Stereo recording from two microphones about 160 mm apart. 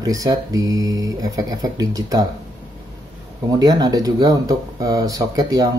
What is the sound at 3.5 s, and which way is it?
Speech, 25° right (ahead or behind).